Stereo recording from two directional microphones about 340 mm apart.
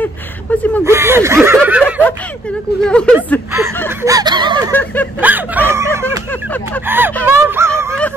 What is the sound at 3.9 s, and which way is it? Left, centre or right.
Snicker, centre.